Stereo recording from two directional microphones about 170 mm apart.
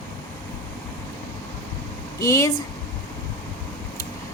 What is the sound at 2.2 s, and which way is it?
Speech, 20° left (ahead or behind).